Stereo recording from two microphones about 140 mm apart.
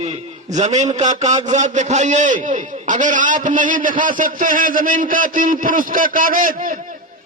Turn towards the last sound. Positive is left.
turn(degrees=-75)  # may be behind; listen again after turning